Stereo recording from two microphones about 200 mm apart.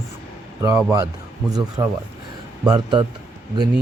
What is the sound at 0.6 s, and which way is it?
Speech, 15° right (ahead or behind).